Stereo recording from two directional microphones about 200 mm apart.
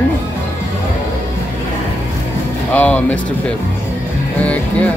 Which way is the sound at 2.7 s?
5° left (ahead or behind).